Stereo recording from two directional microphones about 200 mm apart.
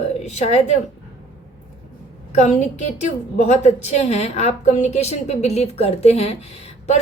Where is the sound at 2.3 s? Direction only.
35° left (ahead or behind).